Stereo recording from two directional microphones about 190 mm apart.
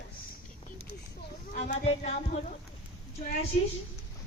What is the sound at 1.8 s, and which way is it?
Music, 35° left (ahead or behind).